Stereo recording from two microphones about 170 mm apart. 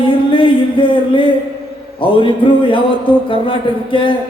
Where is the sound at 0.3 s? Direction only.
30° left (ahead or behind).